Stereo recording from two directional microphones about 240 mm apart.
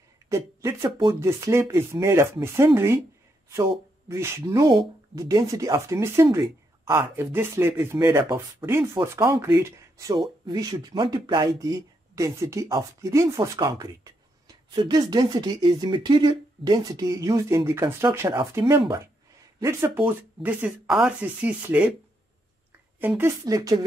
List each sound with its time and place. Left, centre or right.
0.3 s speech: centre
4.1 s speech: centre
22.9 s speech: centre